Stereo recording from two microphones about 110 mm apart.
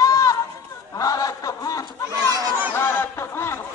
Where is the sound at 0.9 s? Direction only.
35° left (ahead or behind).